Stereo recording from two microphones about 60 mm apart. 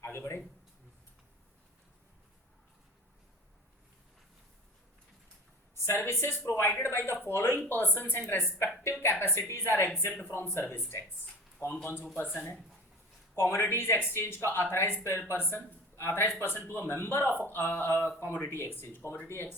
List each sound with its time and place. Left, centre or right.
5.8 s a man's voice: left
8.8 s a man's voice: left
11.6 s a man's voice: left
12.1 s a man's voice: left